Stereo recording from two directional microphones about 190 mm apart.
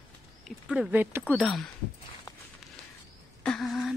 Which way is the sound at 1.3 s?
Centre (ahead or behind).